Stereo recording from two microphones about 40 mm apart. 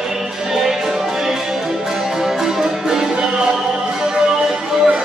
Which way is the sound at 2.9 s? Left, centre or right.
Centre.